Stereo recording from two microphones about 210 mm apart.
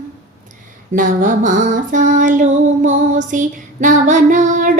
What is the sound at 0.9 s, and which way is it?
Female singing, 40° right (ahead or behind).